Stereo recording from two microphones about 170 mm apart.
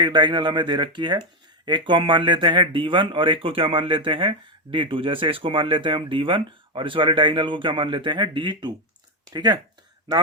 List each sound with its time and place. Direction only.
0.0 s speech: 25° right (ahead or behind)